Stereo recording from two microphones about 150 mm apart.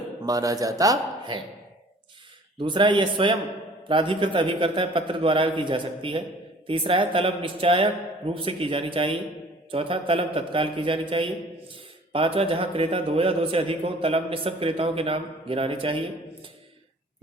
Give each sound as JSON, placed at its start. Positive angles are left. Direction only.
{"t": 0.2, "sound": "speech", "side_deg": -25}
{"t": 2.6, "sound": "a man's voice", "side_deg": -30}